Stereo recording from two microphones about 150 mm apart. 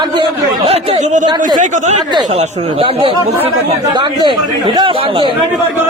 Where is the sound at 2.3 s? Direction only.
40° right (ahead or behind).